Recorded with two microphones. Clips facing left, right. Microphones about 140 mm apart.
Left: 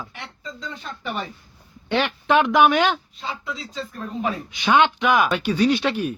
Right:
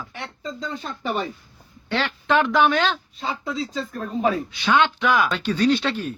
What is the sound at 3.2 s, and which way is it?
Speech, 35° right (ahead or behind).